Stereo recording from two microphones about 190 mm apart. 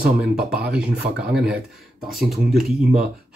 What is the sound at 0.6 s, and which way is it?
Speech, 5° right (ahead or behind).